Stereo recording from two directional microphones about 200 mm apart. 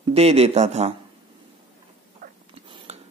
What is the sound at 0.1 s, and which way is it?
Speech, 30° right (ahead or behind).